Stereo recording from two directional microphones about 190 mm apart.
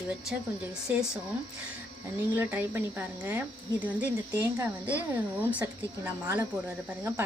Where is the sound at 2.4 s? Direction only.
10° right (ahead or behind).